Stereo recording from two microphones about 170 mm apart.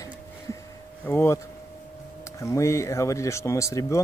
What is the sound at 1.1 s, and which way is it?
Speech, 15° left (ahead or behind).